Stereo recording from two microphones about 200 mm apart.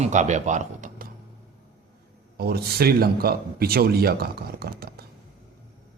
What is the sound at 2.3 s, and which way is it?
Speech, 50° right (ahead or behind).